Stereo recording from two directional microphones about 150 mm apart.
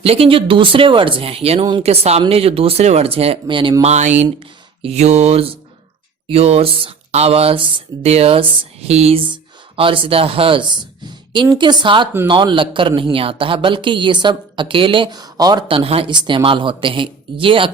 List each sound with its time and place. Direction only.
0.0 s a woman's voice: 40° right (ahead or behind)
1.8 s mantra: 45° right (ahead or behind)
2.2 s a woman's voice: 40° right (ahead or behind)
3.9 s mantra: 50° right (ahead or behind)
6.2 s a woman's voice: 45° right (ahead or behind)